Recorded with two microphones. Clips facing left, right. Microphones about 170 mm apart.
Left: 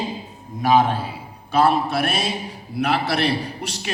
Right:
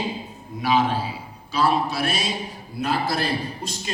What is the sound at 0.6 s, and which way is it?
Speech, 50° left (ahead or behind).